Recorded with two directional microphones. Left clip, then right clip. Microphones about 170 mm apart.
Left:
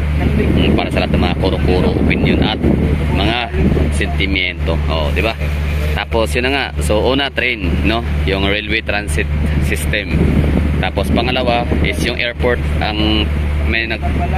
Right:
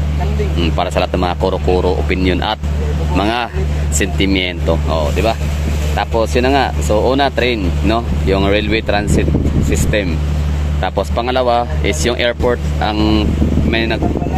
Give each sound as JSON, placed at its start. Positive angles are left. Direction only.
{"t": 0.6, "sound": "speech", "side_deg": -25}
{"t": 4.9, "sound": "speech", "side_deg": -10}
{"t": 10.8, "sound": "speech", "side_deg": -25}